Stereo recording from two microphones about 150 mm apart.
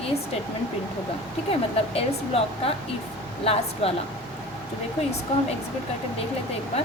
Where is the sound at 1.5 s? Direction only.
40° left (ahead or behind).